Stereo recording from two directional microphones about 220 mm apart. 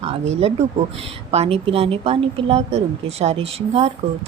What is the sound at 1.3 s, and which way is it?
Speech, 25° right (ahead or behind).